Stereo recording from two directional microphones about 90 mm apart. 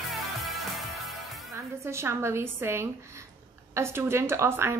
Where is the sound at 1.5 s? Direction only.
30° right (ahead or behind).